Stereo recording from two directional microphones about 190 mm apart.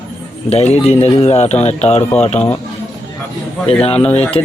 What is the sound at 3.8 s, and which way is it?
Speech, 30° left (ahead or behind).